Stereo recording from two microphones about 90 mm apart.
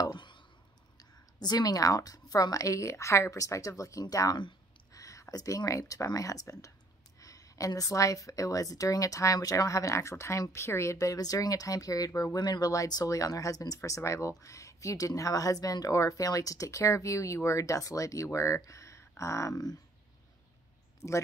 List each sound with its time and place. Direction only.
0.0 s clicking: 55° left (ahead or behind)
0.9 s speech: 45° left (ahead or behind)